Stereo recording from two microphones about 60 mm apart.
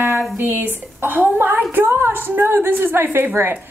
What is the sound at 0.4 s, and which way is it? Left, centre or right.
A woman's voice, right.